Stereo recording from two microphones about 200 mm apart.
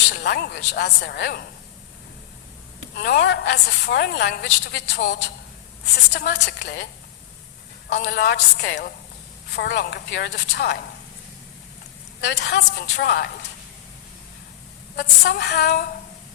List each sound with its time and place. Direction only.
0.1 s a woman's voice: 55° left (ahead or behind)
2.9 s a woman's voice: 55° left (ahead or behind)
7.9 s a woman's voice: 55° left (ahead or behind)
12.2 s a woman's voice: 55° left (ahead or behind)
14.9 s female singing: 55° left (ahead or behind)